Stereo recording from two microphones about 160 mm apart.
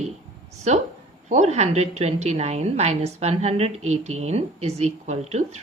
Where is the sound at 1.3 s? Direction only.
45° right (ahead or behind).